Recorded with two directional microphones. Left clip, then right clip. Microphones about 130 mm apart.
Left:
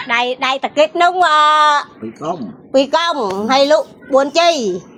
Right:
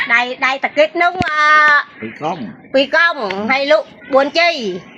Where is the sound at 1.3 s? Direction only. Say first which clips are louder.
Even; 40° left (ahead or behind).